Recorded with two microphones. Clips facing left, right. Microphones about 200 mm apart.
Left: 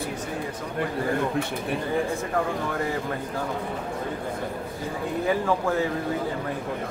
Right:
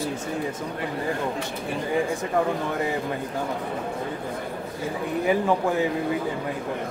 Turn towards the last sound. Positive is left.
turn(degrees=-15)  # may be behind; listen again after turning